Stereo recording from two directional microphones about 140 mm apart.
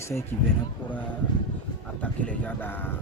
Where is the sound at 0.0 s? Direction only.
20° left (ahead or behind).